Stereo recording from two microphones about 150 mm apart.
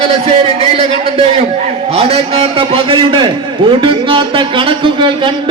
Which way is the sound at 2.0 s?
40° right (ahead or behind).